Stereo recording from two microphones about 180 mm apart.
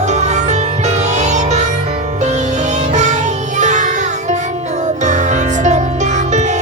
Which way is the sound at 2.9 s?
40° right (ahead or behind).